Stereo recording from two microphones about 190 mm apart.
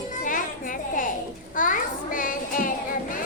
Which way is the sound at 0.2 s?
45° left (ahead or behind).